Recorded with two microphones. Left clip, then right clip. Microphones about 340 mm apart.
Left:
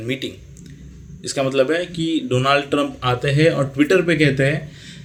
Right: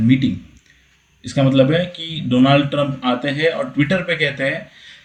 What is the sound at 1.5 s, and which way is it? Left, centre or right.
Speech, left.